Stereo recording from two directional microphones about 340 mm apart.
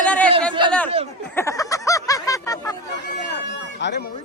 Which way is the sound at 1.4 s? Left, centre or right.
Centre.